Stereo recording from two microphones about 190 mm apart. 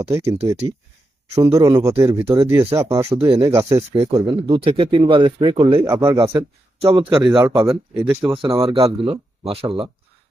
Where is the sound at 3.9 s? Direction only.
30° right (ahead or behind).